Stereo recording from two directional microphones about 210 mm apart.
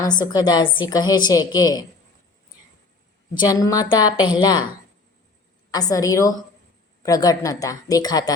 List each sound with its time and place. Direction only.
0.0 s a woman's voice: 20° left (ahead or behind)
3.4 s a woman's voice: 15° left (ahead or behind)
5.7 s a woman's voice: 15° left (ahead or behind)